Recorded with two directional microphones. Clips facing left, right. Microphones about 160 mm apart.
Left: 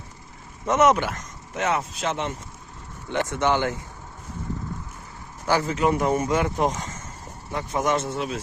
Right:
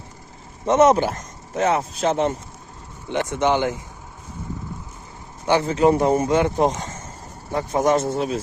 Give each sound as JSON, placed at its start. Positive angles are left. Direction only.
{"t": 0.6, "sound": "speech", "side_deg": -30}
{"t": 3.1, "sound": "speech", "side_deg": -15}
{"t": 5.5, "sound": "speech", "side_deg": -25}